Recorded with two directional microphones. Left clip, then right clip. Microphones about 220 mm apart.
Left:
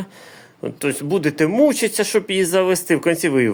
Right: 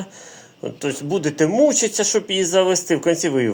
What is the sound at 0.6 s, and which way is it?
Speech, 30° left (ahead or behind).